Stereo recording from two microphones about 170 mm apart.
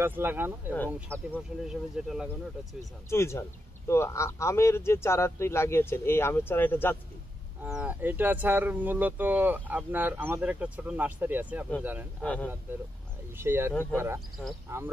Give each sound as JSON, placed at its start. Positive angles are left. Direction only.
{"t": 0.0, "sound": "speech", "side_deg": -10}
{"t": 3.1, "sound": "speech", "side_deg": 15}
{"t": 7.6, "sound": "speech", "side_deg": -10}
{"t": 12.2, "sound": "speech", "side_deg": 10}
{"t": 13.4, "sound": "speech", "side_deg": -15}